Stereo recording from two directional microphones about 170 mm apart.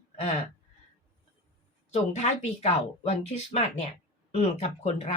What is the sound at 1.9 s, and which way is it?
Speech, 40° left (ahead or behind).